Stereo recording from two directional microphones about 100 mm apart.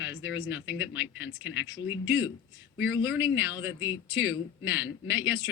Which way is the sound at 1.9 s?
30° right (ahead or behind).